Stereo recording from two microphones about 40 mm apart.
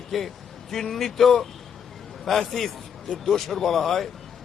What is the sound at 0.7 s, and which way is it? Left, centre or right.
A man's voice, centre.